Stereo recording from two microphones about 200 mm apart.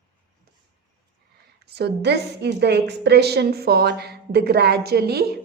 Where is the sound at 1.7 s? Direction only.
55° right (ahead or behind).